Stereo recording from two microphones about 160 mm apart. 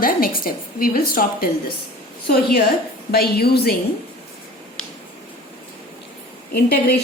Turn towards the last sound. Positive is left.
turn(degrees=70)  # may be behind; listen again after turning